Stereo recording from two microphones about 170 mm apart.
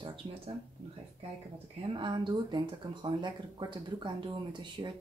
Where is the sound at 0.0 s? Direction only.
30° right (ahead or behind).